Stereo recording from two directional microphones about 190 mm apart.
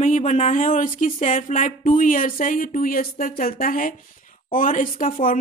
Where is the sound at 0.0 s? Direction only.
40° left (ahead or behind).